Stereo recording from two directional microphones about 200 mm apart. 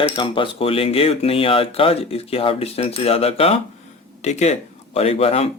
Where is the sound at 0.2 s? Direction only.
25° left (ahead or behind).